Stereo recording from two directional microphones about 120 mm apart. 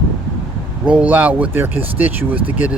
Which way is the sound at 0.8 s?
10° right (ahead or behind).